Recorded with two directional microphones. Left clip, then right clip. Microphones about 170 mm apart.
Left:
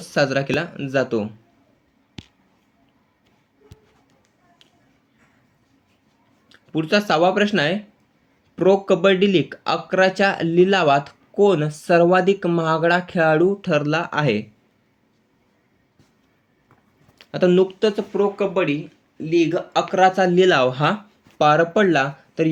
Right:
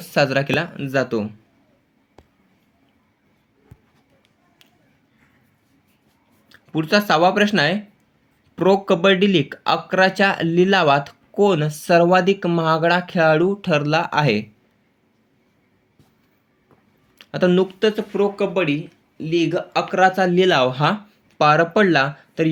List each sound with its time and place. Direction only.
0.0 s speech: 25° right (ahead or behind)
6.5 s speech: 20° right (ahead or behind)
17.2 s speech: 15° right (ahead or behind)
21.3 s speech: 25° right (ahead or behind)